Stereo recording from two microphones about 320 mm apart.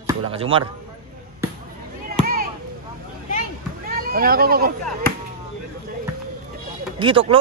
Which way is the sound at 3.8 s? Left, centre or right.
Right.